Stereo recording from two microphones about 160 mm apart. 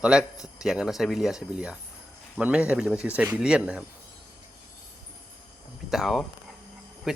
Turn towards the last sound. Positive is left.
turn(degrees=-5)  # may be behind; listen again after turning